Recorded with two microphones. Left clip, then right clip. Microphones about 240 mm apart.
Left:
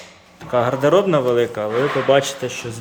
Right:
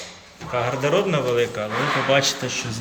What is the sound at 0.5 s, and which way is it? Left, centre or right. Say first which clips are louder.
A man's voice: left 6 dB; left.